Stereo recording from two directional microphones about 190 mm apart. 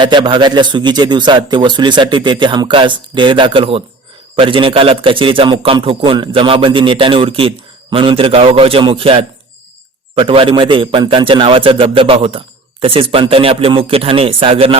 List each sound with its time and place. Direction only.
0.0 s a man's voice: 25° right (ahead or behind)